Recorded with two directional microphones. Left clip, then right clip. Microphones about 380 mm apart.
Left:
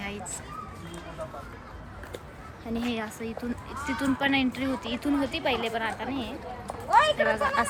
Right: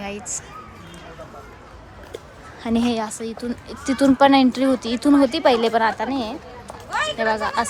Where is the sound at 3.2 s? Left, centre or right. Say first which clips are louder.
Right 6 dB; centre.